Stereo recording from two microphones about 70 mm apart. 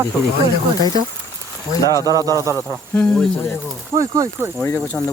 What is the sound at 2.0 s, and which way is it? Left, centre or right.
Speech, right.